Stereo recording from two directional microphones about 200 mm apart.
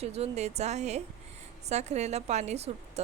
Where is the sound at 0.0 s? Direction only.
30° right (ahead or behind).